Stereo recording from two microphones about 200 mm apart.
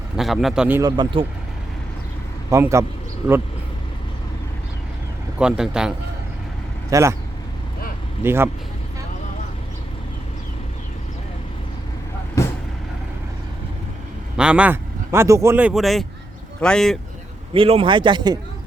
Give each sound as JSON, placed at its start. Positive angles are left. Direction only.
{"t": 0.2, "sound": "a man's voice", "side_deg": 0}
{"t": 0.8, "sound": "speech", "side_deg": -20}
{"t": 2.5, "sound": "speech", "side_deg": -15}
{"t": 5.4, "sound": "a man's voice", "side_deg": -5}
{"t": 6.9, "sound": "speech", "side_deg": -15}
{"t": 8.2, "sound": "speech", "side_deg": -10}
{"t": 14.3, "sound": "a man's voice", "side_deg": -5}
{"t": 17.5, "sound": "speech", "side_deg": -25}